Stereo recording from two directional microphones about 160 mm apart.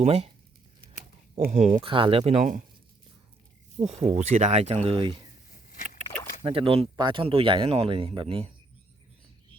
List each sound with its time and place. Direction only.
0.0 s speech: 40° right (ahead or behind)
1.4 s speech: 50° right (ahead or behind)
1.7 s speech: 30° right (ahead or behind)
4.0 s speech: 45° right (ahead or behind)
5.5 s a sound: 60° left (ahead or behind)
6.4 s speech: 35° right (ahead or behind)